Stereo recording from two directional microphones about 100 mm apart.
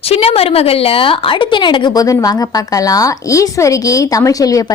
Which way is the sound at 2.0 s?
35° left (ahead or behind).